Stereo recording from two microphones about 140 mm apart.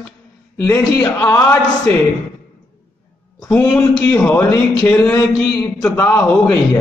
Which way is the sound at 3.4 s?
15° left (ahead or behind).